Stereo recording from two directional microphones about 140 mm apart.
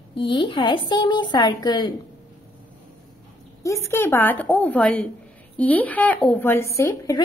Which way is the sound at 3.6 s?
20° left (ahead or behind).